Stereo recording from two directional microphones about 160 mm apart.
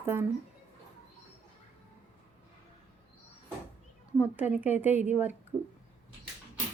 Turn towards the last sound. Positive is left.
turn(degrees=-10)  # may be behind; listen again after turning